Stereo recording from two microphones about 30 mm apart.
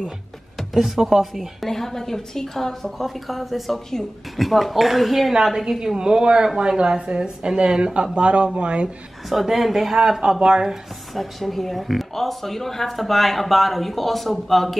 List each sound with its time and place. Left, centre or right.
0.7 s speech: centre
1.7 s a woman's voice: centre
3.0 s a woman's voice: centre
5.8 s a woman's voice: right
9.3 s speech: centre
10.4 s speech: right
11.1 s speech: centre